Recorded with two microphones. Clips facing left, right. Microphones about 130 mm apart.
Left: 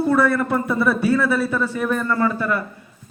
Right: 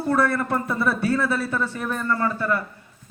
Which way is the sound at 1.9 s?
30° right (ahead or behind).